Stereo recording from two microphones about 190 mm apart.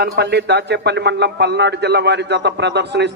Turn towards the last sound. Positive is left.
turn(degrees=-65)  # may be behind; listen again after turning